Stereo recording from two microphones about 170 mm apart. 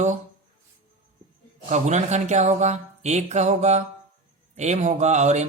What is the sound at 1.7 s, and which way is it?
Speech, 40° right (ahead or behind).